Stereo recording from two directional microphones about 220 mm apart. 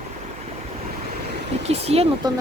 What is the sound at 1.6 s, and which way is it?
Speech, 30° right (ahead or behind).